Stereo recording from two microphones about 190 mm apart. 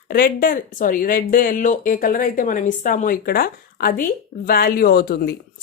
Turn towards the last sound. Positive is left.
turn(degrees=55)  # may be behind; listen again after turning